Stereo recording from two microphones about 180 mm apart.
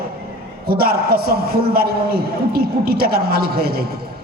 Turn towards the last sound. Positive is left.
turn(degrees=-55)  # may be behind; listen again after turning